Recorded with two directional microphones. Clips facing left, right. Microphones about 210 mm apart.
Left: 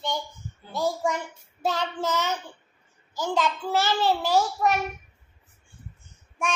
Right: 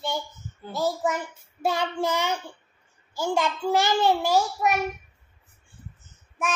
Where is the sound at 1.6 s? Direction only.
10° right (ahead or behind).